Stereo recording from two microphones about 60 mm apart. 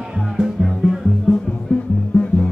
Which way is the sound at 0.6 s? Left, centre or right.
Centre.